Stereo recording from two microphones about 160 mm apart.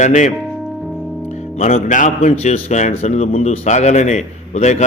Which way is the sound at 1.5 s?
45° left (ahead or behind).